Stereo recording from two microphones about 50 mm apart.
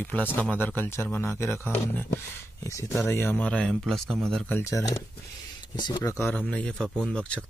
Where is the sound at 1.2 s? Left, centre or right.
Left.